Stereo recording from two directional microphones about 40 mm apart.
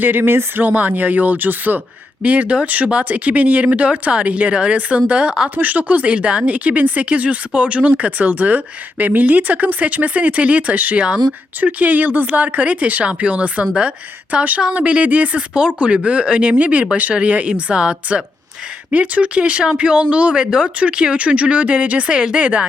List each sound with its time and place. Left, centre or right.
0.0 s speech: right
0.6 s speech: right
2.2 s speech: right
5.5 s speech: right
10.9 s speech: right
11.6 s speech: right